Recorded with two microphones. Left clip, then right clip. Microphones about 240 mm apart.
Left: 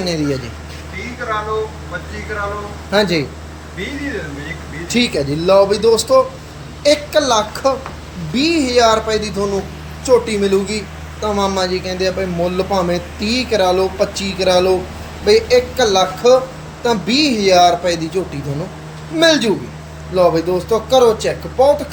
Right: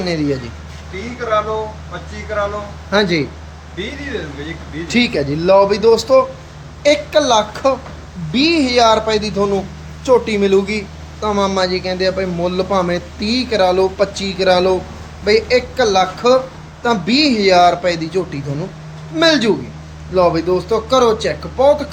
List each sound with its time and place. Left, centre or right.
0.0 s speech: centre
2.9 s speech: centre
4.9 s speech: centre